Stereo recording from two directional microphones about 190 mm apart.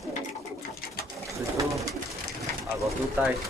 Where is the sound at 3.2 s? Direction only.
10° right (ahead or behind).